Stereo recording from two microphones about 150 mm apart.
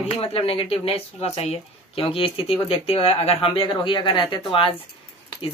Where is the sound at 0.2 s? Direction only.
40° left (ahead or behind).